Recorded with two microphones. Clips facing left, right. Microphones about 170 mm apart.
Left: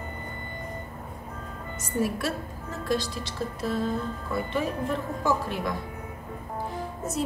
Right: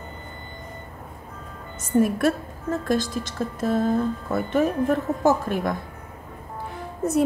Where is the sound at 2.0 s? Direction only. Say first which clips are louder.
Right 8 dB; 50° right (ahead or behind).